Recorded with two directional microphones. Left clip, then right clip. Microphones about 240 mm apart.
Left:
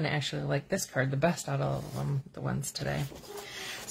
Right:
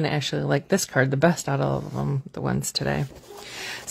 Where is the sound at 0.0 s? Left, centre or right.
Right.